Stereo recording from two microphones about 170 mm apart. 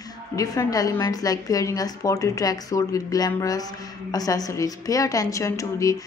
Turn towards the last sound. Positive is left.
turn(degrees=20)  # may be behind; listen again after turning